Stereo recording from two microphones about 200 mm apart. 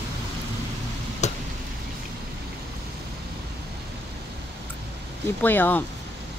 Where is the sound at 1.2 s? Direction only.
35° left (ahead or behind).